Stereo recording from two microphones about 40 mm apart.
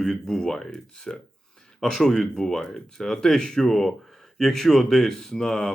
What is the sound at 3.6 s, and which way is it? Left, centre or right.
Speech, centre.